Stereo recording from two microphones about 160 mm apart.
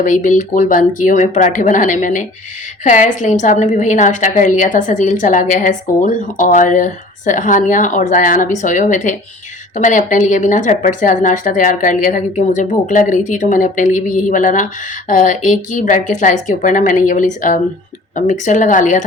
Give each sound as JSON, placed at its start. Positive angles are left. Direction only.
{"t": 0.0, "sound": "a woman's voice", "side_deg": 55}